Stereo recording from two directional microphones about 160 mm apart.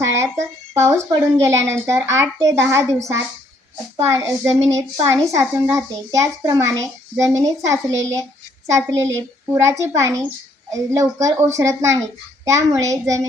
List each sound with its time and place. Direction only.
0.0 s a child's voice: 15° right (ahead or behind)